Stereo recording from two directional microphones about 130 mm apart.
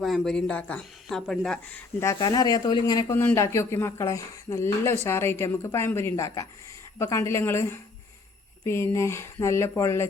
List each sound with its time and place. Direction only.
0.0 s speech: centre (ahead or behind)
2.1 s speech: 30° left (ahead or behind)
3.2 s speech: 20° left (ahead or behind)